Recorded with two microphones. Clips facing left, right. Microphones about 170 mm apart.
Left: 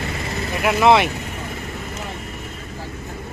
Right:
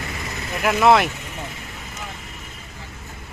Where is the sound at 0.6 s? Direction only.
Centre (ahead or behind).